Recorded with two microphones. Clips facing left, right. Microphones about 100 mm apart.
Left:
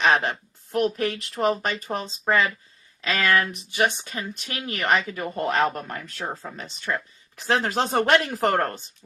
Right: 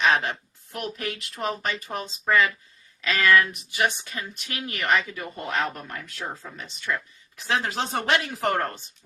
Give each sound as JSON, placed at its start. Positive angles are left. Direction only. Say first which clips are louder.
{"t": 0.0, "sound": "speech", "louder": "left 2 dB", "side_deg": 35}